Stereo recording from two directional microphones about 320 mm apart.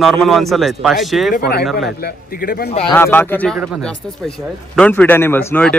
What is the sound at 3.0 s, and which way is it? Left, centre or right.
A man's voice, centre.